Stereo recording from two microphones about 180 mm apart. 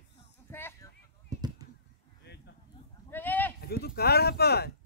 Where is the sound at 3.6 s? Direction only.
60° left (ahead or behind).